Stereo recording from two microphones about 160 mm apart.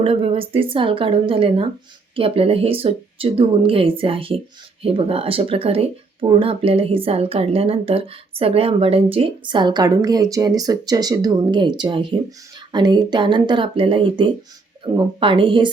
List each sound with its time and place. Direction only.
0.0 s speech: 35° right (ahead or behind)